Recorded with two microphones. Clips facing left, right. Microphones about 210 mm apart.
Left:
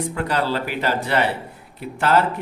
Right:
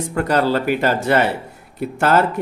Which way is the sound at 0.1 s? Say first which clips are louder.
Right 10 dB; 45° right (ahead or behind).